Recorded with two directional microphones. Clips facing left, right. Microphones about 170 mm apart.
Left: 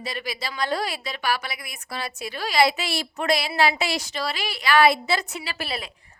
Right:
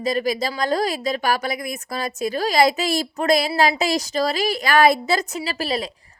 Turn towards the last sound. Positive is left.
turn(degrees=-40)  # may be behind; listen again after turning